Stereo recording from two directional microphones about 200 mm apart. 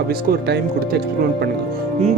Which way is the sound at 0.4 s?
55° right (ahead or behind).